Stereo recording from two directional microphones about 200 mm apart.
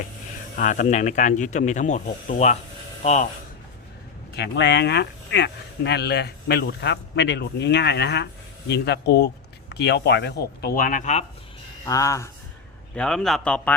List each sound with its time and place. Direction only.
0.5 s speech: 40° left (ahead or behind)
4.4 s speech: 60° left (ahead or behind); by 11.3 s 35° left (ahead or behind)
11.9 s speech: 15° left (ahead or behind)
13.0 s speech: 5° left (ahead or behind)